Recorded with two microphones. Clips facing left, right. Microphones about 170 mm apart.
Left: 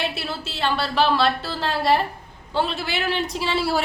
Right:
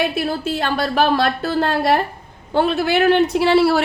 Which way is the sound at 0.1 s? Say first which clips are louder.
Right 10 dB; 50° right (ahead or behind).